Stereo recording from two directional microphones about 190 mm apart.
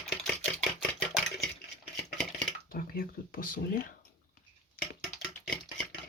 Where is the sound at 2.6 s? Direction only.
50° left (ahead or behind).